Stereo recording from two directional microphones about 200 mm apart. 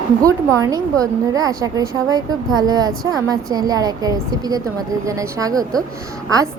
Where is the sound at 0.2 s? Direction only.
15° right (ahead or behind).